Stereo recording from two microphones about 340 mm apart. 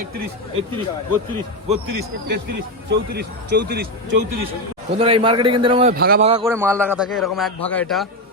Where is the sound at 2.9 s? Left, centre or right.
Right.